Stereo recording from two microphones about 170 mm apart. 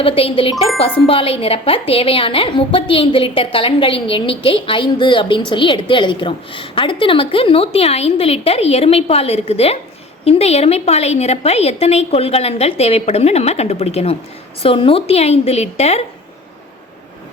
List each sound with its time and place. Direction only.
0.0 s speech: 35° left (ahead or behind)